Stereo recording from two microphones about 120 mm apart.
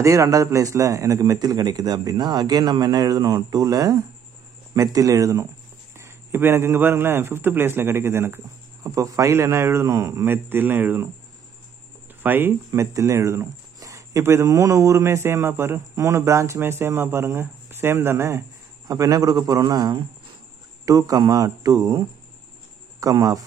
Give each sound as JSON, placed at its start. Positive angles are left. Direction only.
{"t": 0.0, "sound": "speech", "side_deg": -25}
{"t": 12.2, "sound": "a man's voice", "side_deg": -15}